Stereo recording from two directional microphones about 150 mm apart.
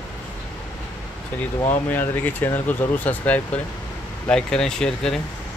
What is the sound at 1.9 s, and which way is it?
Speech, 10° left (ahead or behind).